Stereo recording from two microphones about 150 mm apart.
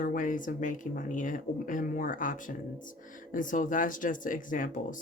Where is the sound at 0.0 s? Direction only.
60° left (ahead or behind).